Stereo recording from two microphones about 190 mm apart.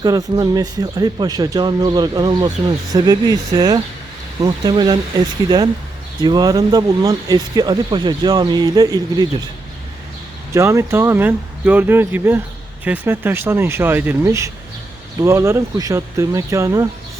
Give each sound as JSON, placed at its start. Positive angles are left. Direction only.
{"t": 0.0, "sound": "speech", "side_deg": -20}
{"t": 6.2, "sound": "speech", "side_deg": -20}
{"t": 10.5, "sound": "speech", "side_deg": -15}